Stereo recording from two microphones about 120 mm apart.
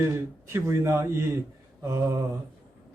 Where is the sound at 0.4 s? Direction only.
20° right (ahead or behind).